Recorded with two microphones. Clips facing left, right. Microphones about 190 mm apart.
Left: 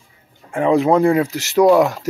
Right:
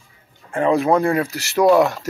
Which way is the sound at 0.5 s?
15° left (ahead or behind).